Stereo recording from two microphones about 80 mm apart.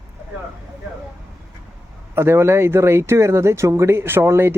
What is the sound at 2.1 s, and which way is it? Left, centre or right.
Speech, right.